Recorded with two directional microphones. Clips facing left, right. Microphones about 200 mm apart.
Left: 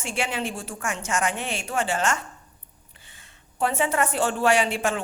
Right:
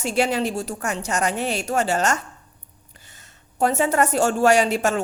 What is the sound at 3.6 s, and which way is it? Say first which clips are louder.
A woman's voice: right 4 dB; 40° right (ahead or behind).